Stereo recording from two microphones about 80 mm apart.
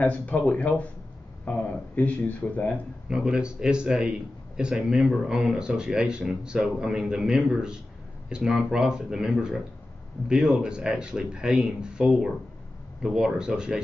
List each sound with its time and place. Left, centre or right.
0.0 s speech: centre
3.1 s speech: centre